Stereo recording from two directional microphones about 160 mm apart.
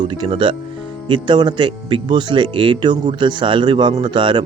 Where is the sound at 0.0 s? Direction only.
30° right (ahead or behind).